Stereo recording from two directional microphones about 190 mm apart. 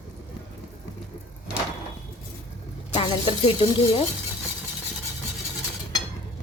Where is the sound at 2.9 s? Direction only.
30° left (ahead or behind).